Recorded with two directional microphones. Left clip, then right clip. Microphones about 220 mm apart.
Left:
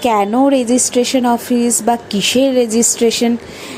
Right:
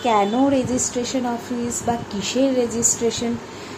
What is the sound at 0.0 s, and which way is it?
A woman's voice, 45° left (ahead or behind).